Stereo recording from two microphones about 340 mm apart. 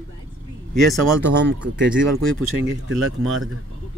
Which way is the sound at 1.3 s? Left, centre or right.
Right.